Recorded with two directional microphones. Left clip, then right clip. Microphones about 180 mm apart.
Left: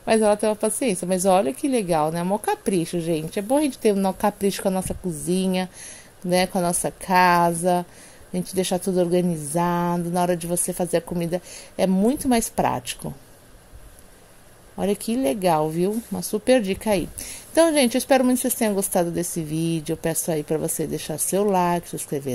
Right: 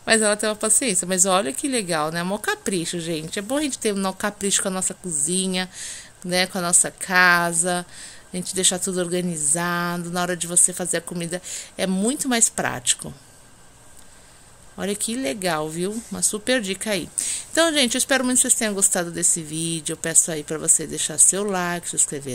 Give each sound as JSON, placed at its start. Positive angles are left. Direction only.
{"t": 0.0, "sound": "speech", "side_deg": 5}
{"t": 14.8, "sound": "speech", "side_deg": 15}